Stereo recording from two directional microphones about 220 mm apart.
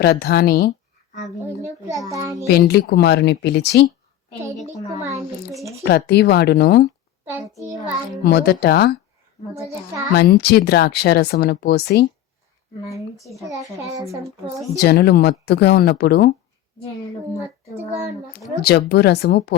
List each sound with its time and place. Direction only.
0.0 s speech: 45° left (ahead or behind)
2.0 s a child's voice: 15° right (ahead or behind)
2.5 s speech: 45° left (ahead or behind)
4.9 s a child's voice: 15° right (ahead or behind)
5.8 s speech: 50° left (ahead or behind)
8.2 s speech: 45° left (ahead or behind)
9.6 s a child's voice: 15° right (ahead or behind)
10.2 s speech: 45° left (ahead or behind)
12.8 s speech: 15° left (ahead or behind)
13.3 s a child's voice: 15° right (ahead or behind)
14.8 s speech: 45° left (ahead or behind)
18.6 s speech: 50° left (ahead or behind)